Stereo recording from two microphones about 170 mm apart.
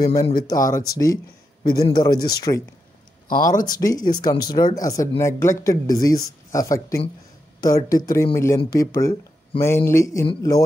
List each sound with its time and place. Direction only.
0.0 s speech: 20° left (ahead or behind)
3.3 s speech: 55° left (ahead or behind)
3.6 s speech: 20° left (ahead or behind)